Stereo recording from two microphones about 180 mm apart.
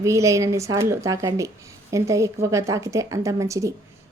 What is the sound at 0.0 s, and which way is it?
Speech, 15° right (ahead or behind).